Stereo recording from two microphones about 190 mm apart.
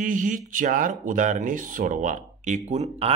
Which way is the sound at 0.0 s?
45° right (ahead or behind).